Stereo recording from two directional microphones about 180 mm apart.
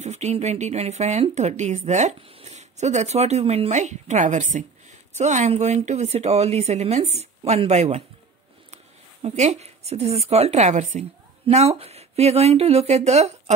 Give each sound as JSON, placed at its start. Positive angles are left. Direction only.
{"t": 0.0, "sound": "speech", "side_deg": -40}
{"t": 9.2, "sound": "speech", "side_deg": -35}